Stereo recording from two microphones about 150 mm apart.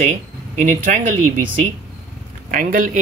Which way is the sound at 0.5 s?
55° right (ahead or behind).